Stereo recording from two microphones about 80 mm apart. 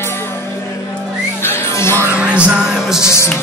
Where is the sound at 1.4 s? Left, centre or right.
Left.